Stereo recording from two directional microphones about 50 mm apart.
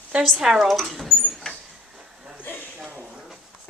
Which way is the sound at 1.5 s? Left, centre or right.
Centre.